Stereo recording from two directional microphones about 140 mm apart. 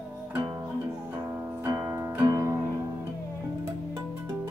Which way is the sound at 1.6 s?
25° right (ahead or behind).